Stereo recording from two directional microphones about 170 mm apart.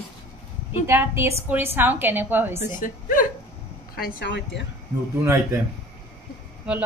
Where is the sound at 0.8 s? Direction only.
15° right (ahead or behind).